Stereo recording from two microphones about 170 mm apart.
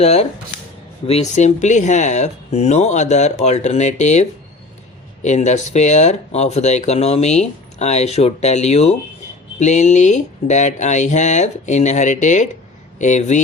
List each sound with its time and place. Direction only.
0.0 s speech: 40° left (ahead or behind)